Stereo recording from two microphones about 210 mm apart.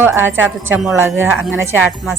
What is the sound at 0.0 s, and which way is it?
A woman's voice, 10° right (ahead or behind).